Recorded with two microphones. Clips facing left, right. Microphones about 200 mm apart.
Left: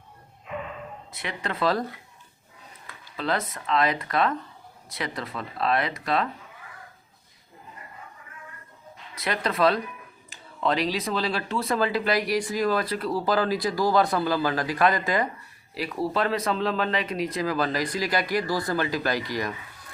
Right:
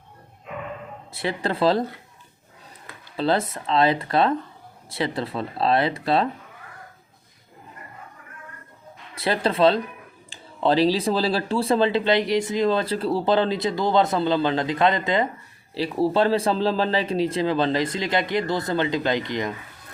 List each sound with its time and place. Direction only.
1.1 s speech: 30° right (ahead or behind)
3.2 s speech: 30° right (ahead or behind)
9.1 s speech: 30° right (ahead or behind)